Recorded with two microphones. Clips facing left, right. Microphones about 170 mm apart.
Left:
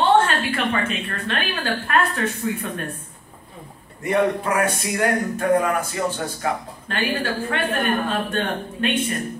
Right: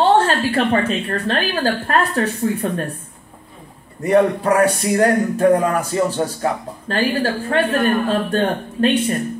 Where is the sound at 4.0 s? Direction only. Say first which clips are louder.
Right 5 dB; 35° right (ahead or behind).